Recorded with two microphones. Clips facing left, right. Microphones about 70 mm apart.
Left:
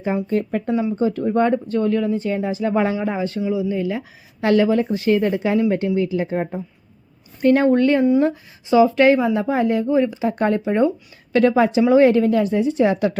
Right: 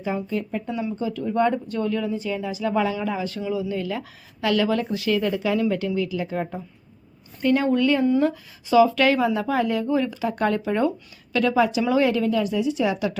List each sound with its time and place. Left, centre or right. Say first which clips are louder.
0.3 s speech: left 6 dB; left
0.7 s speech: left 8 dB; left
3.5 s speech: left 2 dB; centre
4.4 s speech: left 5 dB; left
7.4 s speech: left 5 dB; left
8.7 s speech: left 3 dB; left